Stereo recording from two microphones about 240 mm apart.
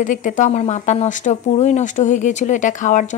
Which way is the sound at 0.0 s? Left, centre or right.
Left.